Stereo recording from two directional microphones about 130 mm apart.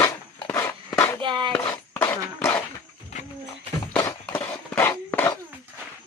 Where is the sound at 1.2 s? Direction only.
40° right (ahead or behind).